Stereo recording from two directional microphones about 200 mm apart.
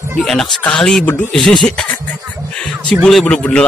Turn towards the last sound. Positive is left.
turn(degrees=5)  # may be behind; listen again after turning